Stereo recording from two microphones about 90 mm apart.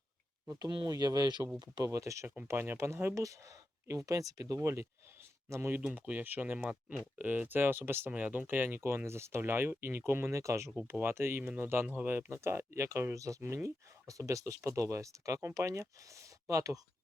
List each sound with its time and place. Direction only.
0.9 s speech: 45° right (ahead or behind)
1.9 s speech: 35° right (ahead or behind)
2.2 s speech: 15° right (ahead or behind)
2.5 s speech: 25° right (ahead or behind)